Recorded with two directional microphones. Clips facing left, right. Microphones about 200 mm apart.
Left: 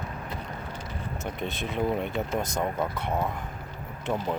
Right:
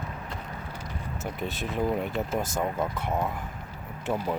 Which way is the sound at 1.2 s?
5° right (ahead or behind).